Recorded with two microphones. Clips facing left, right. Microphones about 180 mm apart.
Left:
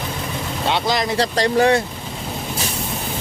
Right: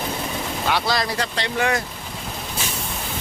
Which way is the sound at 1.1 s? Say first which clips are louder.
Left 8 dB; 40° left (ahead or behind).